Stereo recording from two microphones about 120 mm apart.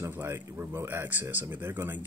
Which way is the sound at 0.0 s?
20° right (ahead or behind).